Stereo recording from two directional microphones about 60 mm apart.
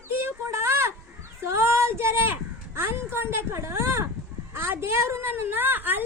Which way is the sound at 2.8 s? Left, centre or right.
Right.